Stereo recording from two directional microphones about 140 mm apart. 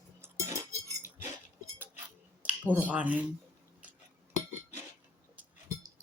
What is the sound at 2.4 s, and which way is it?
Speech, 10° right (ahead or behind).